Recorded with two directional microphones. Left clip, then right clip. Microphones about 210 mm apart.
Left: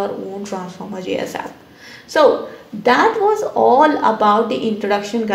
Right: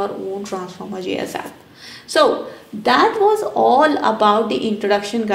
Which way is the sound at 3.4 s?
20° right (ahead or behind).